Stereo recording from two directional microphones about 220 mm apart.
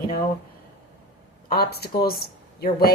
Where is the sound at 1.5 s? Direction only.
45° left (ahead or behind).